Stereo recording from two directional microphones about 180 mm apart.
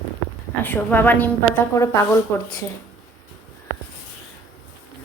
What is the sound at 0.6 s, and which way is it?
A woman's voice, 10° left (ahead or behind).